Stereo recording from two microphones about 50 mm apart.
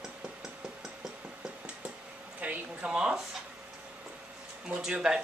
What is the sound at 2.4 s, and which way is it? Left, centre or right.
Speech, right.